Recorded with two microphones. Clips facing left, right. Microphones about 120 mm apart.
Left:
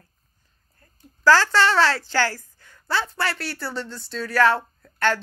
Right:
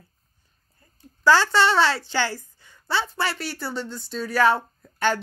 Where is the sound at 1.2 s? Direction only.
Centre (ahead or behind).